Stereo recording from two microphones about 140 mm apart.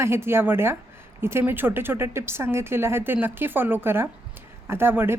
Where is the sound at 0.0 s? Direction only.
15° right (ahead or behind).